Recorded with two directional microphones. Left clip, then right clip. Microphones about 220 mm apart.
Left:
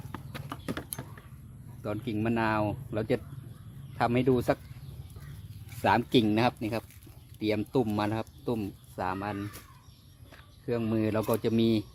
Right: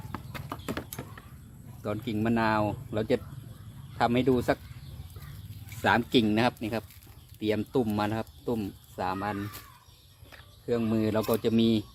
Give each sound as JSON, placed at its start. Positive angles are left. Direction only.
{"t": 0.1, "sound": "clip-clop", "side_deg": 15}
{"t": 1.8, "sound": "speech", "side_deg": 25}
{"t": 5.8, "sound": "speech", "side_deg": 25}
{"t": 10.7, "sound": "speech", "side_deg": 25}